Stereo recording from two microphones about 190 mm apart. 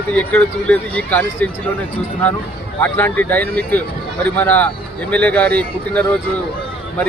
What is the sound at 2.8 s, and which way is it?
Speech, 10° left (ahead or behind).